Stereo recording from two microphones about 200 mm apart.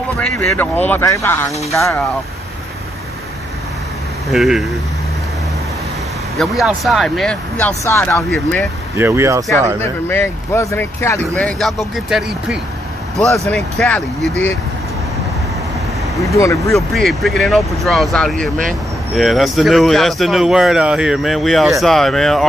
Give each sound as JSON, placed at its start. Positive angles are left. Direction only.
{"t": 0.2, "sound": "speech", "side_deg": 5}
{"t": 4.3, "sound": "speech", "side_deg": 0}
{"t": 6.3, "sound": "speech", "side_deg": 0}
{"t": 8.9, "sound": "speech", "side_deg": -10}
{"t": 9.8, "sound": "speech", "side_deg": 10}
{"t": 16.3, "sound": "speech", "side_deg": 15}
{"t": 16.7, "sound": "speech", "side_deg": 0}